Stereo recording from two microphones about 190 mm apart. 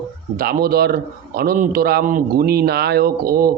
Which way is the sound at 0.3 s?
55° right (ahead or behind).